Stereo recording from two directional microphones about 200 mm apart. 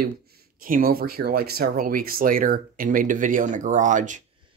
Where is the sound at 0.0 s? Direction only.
50° right (ahead or behind).